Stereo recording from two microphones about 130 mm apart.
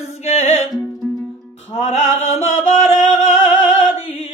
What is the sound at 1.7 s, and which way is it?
Music, 55° left (ahead or behind).